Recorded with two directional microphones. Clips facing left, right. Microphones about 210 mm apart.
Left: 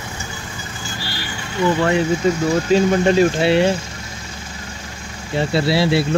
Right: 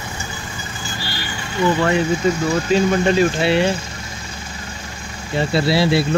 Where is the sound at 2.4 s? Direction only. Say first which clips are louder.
Left 3 dB; 40° left (ahead or behind).